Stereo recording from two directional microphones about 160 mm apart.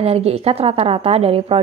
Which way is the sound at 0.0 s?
40° right (ahead or behind).